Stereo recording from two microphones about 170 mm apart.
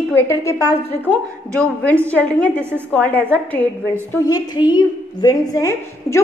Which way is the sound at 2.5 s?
10° right (ahead or behind).